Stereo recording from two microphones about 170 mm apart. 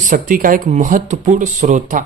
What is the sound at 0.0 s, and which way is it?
Speech, 50° right (ahead or behind).